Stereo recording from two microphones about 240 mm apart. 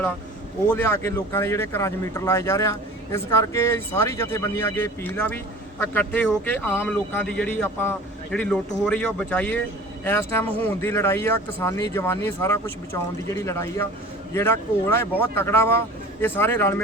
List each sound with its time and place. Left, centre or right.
0.7 s speech: centre